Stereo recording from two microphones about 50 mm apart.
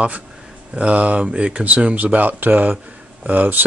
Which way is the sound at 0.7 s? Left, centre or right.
Right.